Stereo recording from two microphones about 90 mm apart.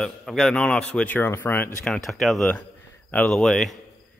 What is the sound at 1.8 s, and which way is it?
Speech, 5° left (ahead or behind).